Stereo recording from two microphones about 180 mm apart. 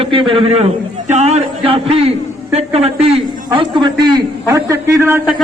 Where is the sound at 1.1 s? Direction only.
40° right (ahead or behind); by 5.4 s 15° right (ahead or behind).